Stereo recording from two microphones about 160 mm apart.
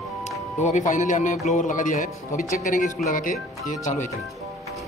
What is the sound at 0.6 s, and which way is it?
Speech, 50° left (ahead or behind).